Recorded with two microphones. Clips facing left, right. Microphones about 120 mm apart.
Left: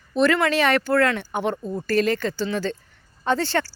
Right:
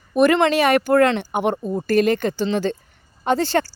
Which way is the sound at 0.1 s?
15° right (ahead or behind).